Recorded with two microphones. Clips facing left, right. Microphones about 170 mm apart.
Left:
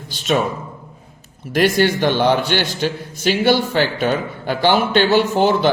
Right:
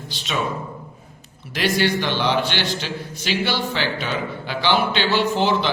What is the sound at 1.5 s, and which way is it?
Speech, 50° left (ahead or behind).